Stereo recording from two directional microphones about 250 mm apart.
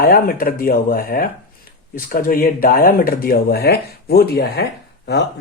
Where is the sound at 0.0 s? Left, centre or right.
Left.